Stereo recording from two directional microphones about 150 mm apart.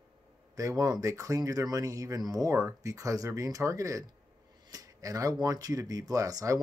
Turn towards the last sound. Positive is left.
turn(degrees=-25)  # may be behind; listen again after turning